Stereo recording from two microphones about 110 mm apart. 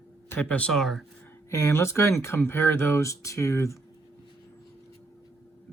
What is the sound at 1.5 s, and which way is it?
Speech, 25° left (ahead or behind).